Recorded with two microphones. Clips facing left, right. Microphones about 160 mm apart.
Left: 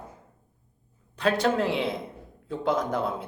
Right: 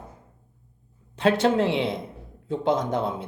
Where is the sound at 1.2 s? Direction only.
25° right (ahead or behind).